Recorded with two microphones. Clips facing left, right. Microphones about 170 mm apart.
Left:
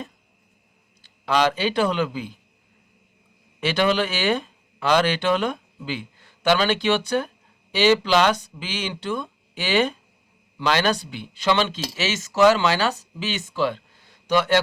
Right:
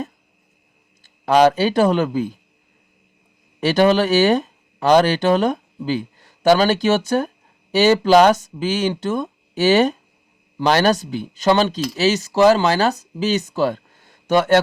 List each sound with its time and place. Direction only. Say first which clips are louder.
1.0 s speech: right 7 dB; 45° right (ahead or behind)
3.6 s speech: right 6 dB; 40° right (ahead or behind)